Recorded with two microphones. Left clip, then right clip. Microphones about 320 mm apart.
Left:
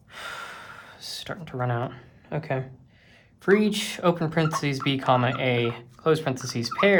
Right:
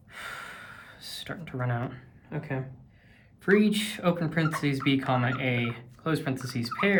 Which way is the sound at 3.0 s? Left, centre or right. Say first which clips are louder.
Left 4 dB; centre.